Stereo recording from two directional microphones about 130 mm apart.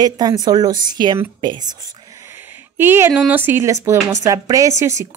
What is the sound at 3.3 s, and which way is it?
A woman's voice, 15° right (ahead or behind).